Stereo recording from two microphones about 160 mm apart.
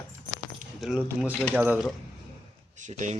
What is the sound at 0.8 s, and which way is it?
Speech, 5° right (ahead or behind).